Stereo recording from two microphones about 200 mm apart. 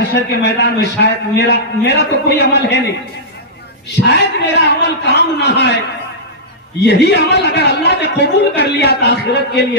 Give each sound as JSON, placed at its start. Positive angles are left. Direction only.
{"t": 0.0, "sound": "a man's voice", "side_deg": 55}
{"t": 3.9, "sound": "a man's voice", "side_deg": 60}
{"t": 6.8, "sound": "a man's voice", "side_deg": 55}